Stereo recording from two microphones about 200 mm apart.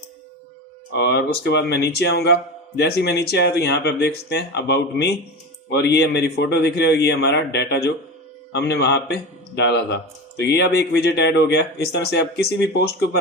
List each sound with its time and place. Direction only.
0.9 s a man's voice: 55° left (ahead or behind)